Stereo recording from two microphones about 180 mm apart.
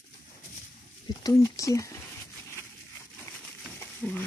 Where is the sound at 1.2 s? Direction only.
20° left (ahead or behind).